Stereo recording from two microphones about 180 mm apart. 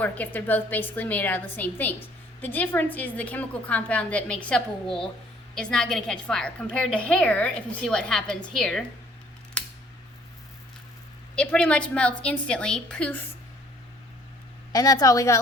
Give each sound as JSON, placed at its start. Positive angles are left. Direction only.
{"t": 0.0, "sound": "a woman's voice", "side_deg": 10}
{"t": 9.6, "sound": "scissors", "side_deg": 5}
{"t": 11.3, "sound": "a woman's voice", "side_deg": 5}
{"t": 14.7, "sound": "a woman's voice", "side_deg": 20}